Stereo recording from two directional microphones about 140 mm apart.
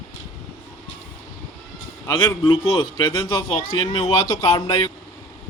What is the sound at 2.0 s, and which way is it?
Speech, 40° left (ahead or behind).